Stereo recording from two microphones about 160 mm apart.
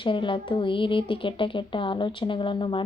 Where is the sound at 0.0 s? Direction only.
30° left (ahead or behind).